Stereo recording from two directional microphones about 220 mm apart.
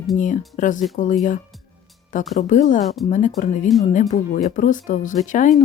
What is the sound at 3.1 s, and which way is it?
Speech, 35° left (ahead or behind).